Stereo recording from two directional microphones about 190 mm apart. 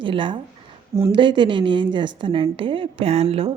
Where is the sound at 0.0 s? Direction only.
25° right (ahead or behind).